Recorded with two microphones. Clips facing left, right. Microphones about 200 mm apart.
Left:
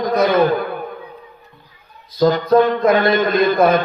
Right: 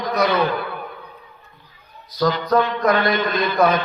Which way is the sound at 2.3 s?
45° left (ahead or behind).